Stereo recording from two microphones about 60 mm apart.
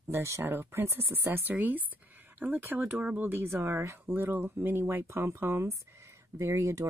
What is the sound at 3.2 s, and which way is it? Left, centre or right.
Speech, right.